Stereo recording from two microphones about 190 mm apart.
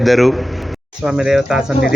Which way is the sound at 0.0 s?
Centre (ahead or behind).